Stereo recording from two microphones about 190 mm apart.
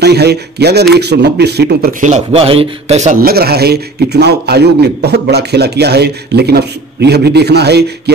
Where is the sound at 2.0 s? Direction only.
35° right (ahead or behind).